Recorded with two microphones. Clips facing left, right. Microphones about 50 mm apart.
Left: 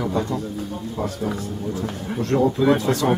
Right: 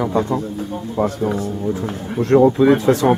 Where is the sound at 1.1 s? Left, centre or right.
Centre.